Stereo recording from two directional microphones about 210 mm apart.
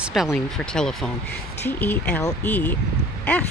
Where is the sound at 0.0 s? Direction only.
Centre (ahead or behind).